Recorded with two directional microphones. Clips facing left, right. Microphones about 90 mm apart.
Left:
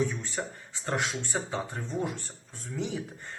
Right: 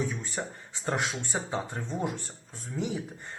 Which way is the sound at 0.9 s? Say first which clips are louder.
Right 1 dB; 25° right (ahead or behind).